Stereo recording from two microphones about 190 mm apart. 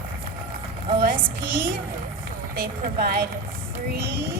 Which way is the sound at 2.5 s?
50° right (ahead or behind).